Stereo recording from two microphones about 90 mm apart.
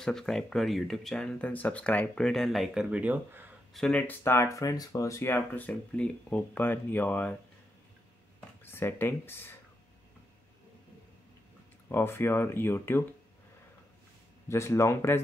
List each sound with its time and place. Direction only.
0.0 s speech: 5° left (ahead or behind)
1.5 s speech: 15° left (ahead or behind); by 3.4 s 15° right (ahead or behind)
3.8 s speech: centre (ahead or behind)
4.2 s speech: 30° left (ahead or behind)
5.3 s speech: 20° left (ahead or behind)
8.6 s speech: 25° left (ahead or behind)
11.9 s speech: 25° left (ahead or behind)
14.5 s speech: 30° left (ahead or behind)